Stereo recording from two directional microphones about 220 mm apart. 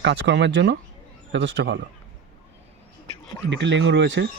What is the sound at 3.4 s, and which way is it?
Speech, 55° right (ahead or behind).